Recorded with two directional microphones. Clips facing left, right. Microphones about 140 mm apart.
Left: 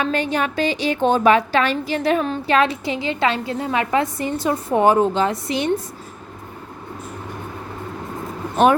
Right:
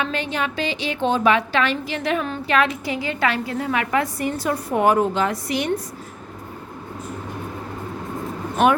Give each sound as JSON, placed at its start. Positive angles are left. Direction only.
{"t": 0.0, "sound": "a woman's voice", "side_deg": 45}